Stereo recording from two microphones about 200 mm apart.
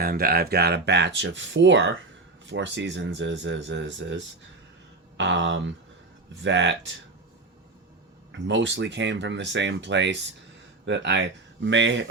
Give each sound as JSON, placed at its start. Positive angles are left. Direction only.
{"t": 0.0, "sound": "speech", "side_deg": -50}
{"t": 8.3, "sound": "speech", "side_deg": -65}